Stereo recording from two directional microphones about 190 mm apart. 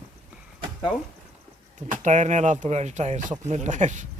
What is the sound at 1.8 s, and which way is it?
Speech, 40° right (ahead or behind).